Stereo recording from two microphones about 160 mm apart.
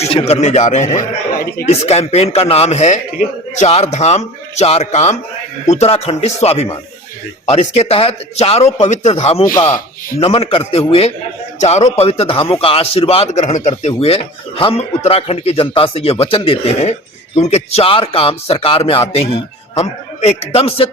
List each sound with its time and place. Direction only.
0.0 s a man's voice: 40° left (ahead or behind)